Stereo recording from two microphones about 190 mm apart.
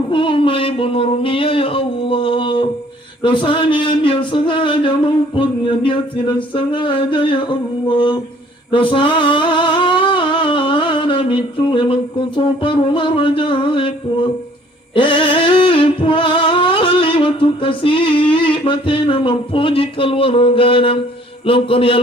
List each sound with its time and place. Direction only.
0.1 s speech: 25° left (ahead or behind)
8.7 s a sound: 25° left (ahead or behind)
12.4 s speech: 25° left (ahead or behind)
14.9 s singing: 25° left (ahead or behind)
21.4 s speech: 30° left (ahead or behind)